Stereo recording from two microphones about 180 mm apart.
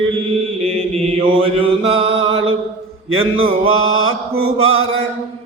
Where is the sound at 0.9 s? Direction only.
30° right (ahead or behind).